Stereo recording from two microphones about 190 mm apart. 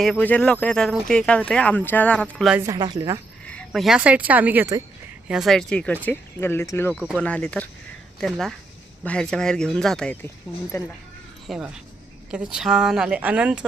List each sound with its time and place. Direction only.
0.0 s speech: 5° left (ahead or behind)
2.6 s a woman's voice: 20° right (ahead or behind)
3.4 s speech: 5° left (ahead or behind); by 4.8 s 10° right (ahead or behind)
5.3 s speech: centre (ahead or behind)
10.7 s speech: 15° left (ahead or behind)
11.4 s speech: 5° right (ahead or behind)